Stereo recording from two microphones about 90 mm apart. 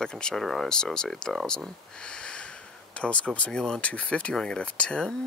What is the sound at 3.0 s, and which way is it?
Speech, 15° left (ahead or behind).